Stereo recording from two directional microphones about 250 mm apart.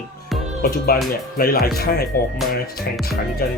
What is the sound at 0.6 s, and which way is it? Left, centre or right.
Speech, left.